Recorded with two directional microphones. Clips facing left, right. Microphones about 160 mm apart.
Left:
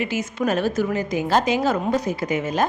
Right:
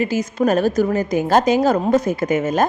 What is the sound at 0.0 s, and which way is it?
A woman's voice, 40° right (ahead or behind).